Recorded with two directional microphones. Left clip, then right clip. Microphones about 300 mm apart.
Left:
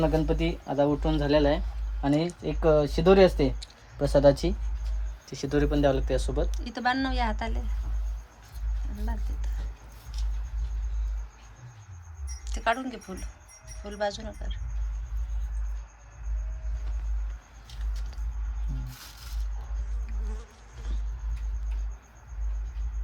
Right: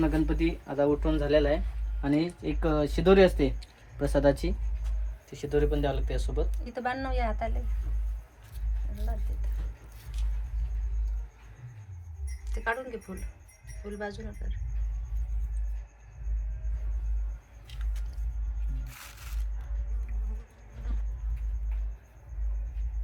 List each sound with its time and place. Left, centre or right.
0.0 s speech: left
6.5 s a woman's voice: centre
12.5 s a woman's voice: centre
14.0 s a woman's voice: centre